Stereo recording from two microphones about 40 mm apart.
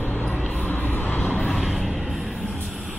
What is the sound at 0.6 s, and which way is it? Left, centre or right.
Vehicle, left.